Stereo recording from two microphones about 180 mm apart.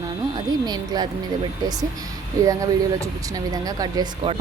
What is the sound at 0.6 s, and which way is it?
Speech, 20° right (ahead or behind).